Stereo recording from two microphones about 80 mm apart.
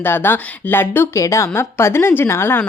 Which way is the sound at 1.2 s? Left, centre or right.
Left.